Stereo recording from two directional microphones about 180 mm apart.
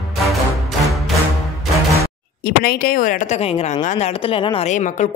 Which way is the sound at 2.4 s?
55° left (ahead or behind).